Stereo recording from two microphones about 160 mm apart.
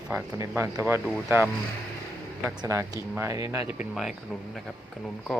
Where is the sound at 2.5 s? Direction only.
20° right (ahead or behind).